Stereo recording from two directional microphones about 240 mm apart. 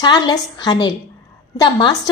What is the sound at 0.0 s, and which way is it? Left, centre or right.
A woman's voice, centre.